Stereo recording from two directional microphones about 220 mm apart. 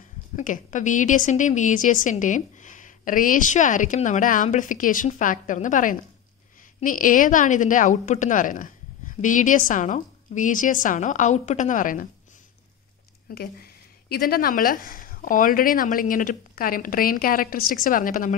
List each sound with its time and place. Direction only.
0.4 s a woman's voice: 35° left (ahead or behind)
13.3 s a woman's voice: 45° left (ahead or behind)